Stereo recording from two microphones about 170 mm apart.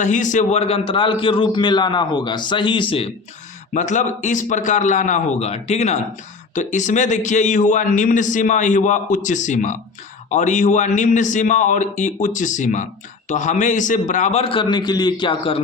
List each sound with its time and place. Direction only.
0.0 s a man's voice: 45° left (ahead or behind)
3.8 s a man's voice: 45° left (ahead or behind); by 15.6 s 30° left (ahead or behind)